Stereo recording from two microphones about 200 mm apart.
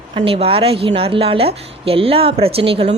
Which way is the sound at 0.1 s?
25° right (ahead or behind).